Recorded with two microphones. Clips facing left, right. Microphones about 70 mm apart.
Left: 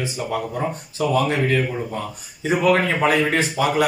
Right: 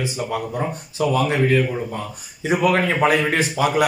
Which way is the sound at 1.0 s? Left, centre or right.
Centre.